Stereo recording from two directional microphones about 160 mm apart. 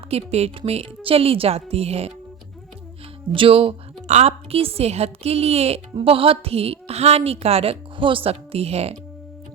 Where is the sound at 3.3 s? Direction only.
35° right (ahead or behind).